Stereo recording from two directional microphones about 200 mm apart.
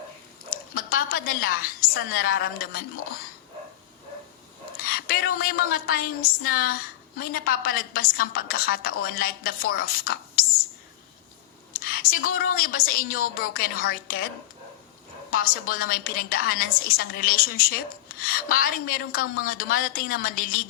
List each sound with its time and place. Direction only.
0.5 s a woman's voice: 45° left (ahead or behind)
4.8 s a woman's voice: 50° left (ahead or behind)
11.9 s a woman's voice: 45° left (ahead or behind)
15.3 s a woman's voice: 45° left (ahead or behind)